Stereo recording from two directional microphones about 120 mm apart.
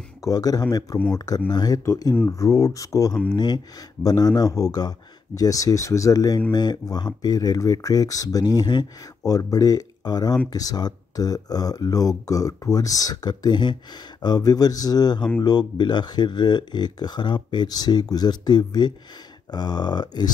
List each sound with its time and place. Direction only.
0.2 s speech: 30° left (ahead or behind)